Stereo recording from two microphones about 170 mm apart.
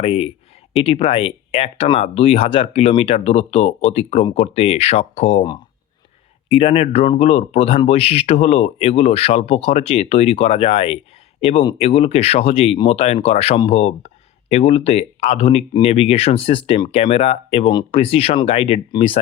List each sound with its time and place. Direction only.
0.0 s speech: 35° left (ahead or behind)
6.5 s speech: 35° left (ahead or behind)